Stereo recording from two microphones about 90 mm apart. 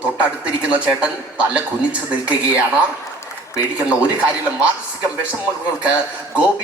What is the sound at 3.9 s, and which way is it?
Speech, 15° right (ahead or behind).